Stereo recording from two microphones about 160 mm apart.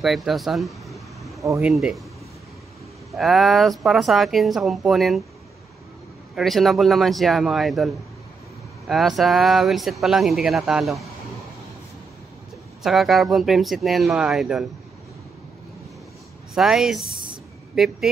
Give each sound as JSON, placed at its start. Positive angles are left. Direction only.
{"t": 0.0, "sound": "air conditioning", "side_deg": 0}
{"t": 1.6, "sound": "speech", "side_deg": -5}
{"t": 3.1, "sound": "speech", "side_deg": 0}
{"t": 6.3, "sound": "speech", "side_deg": 0}
{"t": 12.8, "sound": "speech", "side_deg": 0}
{"t": 16.5, "sound": "speech", "side_deg": 0}
{"t": 17.1, "sound": "a sound", "side_deg": -60}
{"t": 17.7, "sound": "speech", "side_deg": 0}